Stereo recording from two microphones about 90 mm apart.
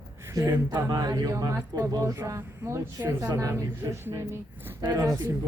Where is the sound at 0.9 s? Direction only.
45° right (ahead or behind).